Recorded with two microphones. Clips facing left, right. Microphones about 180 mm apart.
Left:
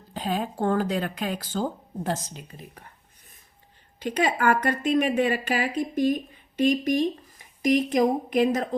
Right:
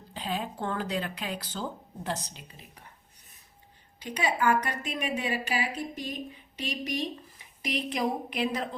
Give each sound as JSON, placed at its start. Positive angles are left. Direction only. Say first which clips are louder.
{"t": 0.1, "sound": "speech", "louder": "left 5 dB", "side_deg": 45}
{"t": 4.0, "sound": "speech", "louder": "left 4 dB", "side_deg": 55}